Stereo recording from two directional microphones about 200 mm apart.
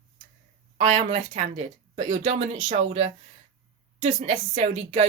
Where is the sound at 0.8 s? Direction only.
35° right (ahead or behind).